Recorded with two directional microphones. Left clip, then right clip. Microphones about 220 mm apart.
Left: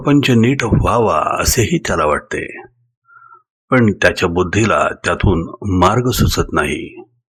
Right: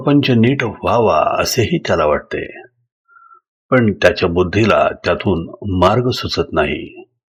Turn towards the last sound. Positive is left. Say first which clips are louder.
# even
turn(degrees=15)  # may be behind; listen again after turning